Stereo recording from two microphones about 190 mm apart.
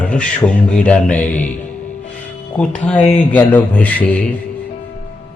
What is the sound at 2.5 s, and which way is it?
A man's voice, 10° left (ahead or behind).